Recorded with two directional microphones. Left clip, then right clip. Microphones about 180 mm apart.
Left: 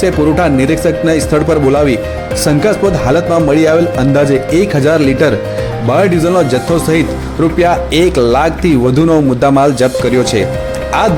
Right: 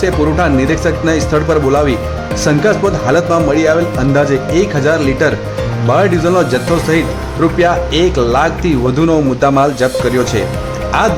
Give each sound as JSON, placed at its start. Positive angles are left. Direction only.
{"t": 0.0, "sound": "speech", "side_deg": 15}